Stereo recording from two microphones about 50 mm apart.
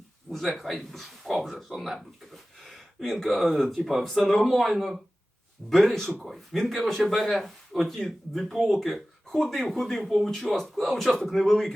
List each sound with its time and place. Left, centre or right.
0.3 s speech: centre